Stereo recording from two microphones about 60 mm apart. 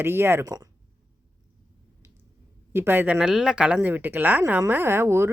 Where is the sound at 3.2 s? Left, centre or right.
Centre.